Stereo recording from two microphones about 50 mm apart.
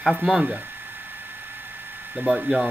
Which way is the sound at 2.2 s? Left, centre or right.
Centre.